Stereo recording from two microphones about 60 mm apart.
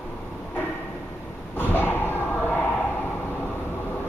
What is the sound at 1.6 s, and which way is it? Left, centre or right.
Slam, left.